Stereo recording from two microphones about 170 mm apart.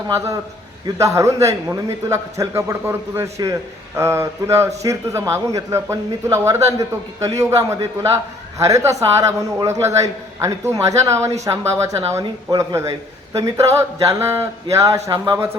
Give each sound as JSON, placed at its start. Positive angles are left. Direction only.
{"t": 0.9, "sound": "speech", "side_deg": -20}